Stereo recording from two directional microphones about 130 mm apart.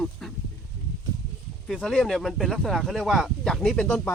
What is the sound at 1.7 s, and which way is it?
Speech, 5° left (ahead or behind).